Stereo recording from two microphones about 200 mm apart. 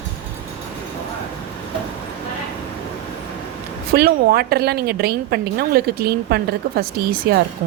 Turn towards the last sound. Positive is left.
turn(degrees=-50)  # may be behind; listen again after turning